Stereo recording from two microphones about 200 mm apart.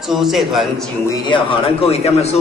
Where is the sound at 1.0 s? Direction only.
25° left (ahead or behind).